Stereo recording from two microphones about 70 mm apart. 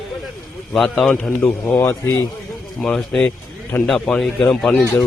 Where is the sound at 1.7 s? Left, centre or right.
Left.